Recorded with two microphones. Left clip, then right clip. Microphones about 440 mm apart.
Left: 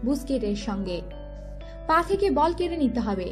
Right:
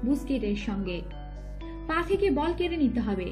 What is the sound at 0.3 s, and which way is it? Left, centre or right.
A woman's voice, centre.